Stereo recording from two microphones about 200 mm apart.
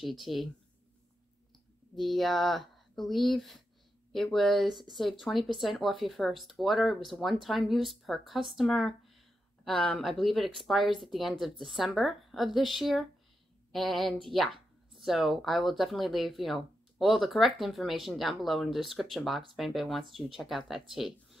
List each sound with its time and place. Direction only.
0.0 s speech: centre (ahead or behind)
2.0 s speech: centre (ahead or behind)